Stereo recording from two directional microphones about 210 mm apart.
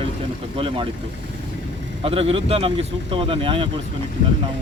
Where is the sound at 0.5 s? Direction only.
25° right (ahead or behind).